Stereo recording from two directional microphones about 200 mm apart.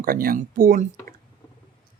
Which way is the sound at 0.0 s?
45° right (ahead or behind).